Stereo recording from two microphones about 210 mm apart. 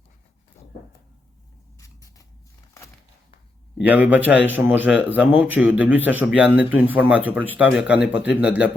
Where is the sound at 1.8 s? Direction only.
15° left (ahead or behind).